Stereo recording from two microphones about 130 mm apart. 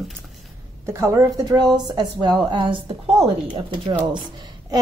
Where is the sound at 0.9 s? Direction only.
20° right (ahead or behind).